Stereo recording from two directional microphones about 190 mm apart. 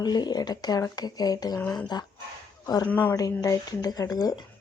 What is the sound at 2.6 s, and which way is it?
Speech, 20° left (ahead or behind).